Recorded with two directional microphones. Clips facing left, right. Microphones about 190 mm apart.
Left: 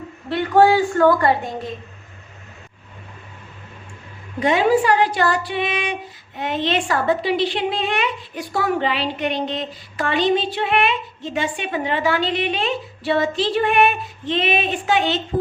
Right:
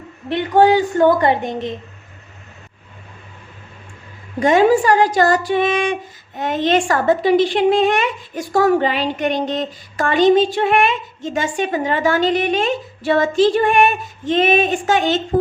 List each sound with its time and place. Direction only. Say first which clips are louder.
0.3 s a woman's voice: right 1 dB; 20° right (ahead or behind)
4.4 s a woman's voice: right 4 dB; 45° right (ahead or behind)